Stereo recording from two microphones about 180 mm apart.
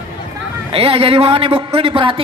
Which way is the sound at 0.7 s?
30° right (ahead or behind).